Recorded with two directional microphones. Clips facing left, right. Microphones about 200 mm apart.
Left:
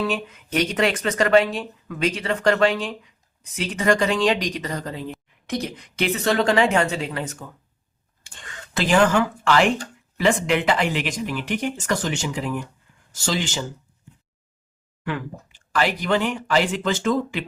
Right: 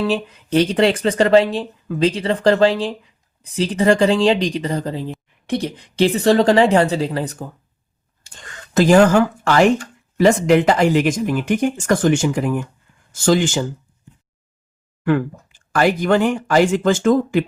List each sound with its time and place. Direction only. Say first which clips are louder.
0.1 s speech: right 7 dB; 30° right (ahead or behind)
8.7 s speech: right 7 dB; 45° right (ahead or behind)
15.0 s speech: right 11 dB; 50° right (ahead or behind)